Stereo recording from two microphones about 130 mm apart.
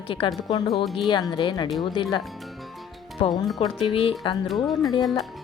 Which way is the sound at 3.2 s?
45° left (ahead or behind).